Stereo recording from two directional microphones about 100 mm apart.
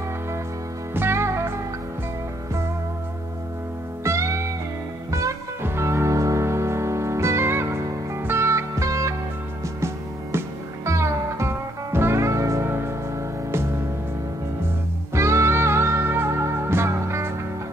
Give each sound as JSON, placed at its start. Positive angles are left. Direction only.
{"t": 0.9, "sound": "music", "side_deg": -25}
{"t": 4.0, "sound": "music", "side_deg": -30}
{"t": 10.9, "sound": "music", "side_deg": -30}
{"t": 15.1, "sound": "music", "side_deg": -30}